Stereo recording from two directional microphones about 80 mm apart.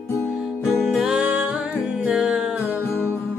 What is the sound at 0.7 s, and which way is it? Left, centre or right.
Music, centre.